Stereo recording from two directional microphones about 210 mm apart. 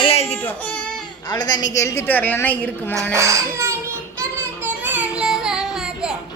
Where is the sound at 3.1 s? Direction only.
15° right (ahead or behind).